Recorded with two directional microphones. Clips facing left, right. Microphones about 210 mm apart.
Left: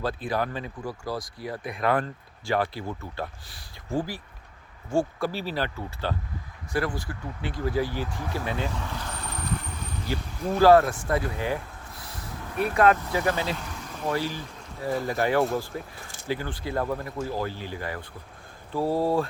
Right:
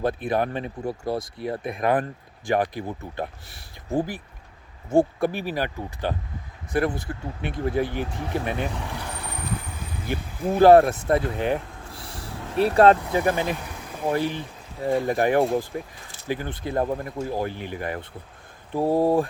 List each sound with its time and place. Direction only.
0.0 s speech: 20° right (ahead or behind)
11.1 s a sound: 20° right (ahead or behind)
13.0 s speech: 20° right (ahead or behind)